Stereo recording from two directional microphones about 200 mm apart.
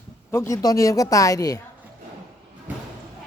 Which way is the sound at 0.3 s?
15° left (ahead or behind).